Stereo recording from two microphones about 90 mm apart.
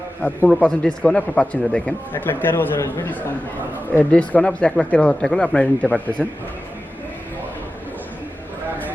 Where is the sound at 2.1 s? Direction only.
20° left (ahead or behind).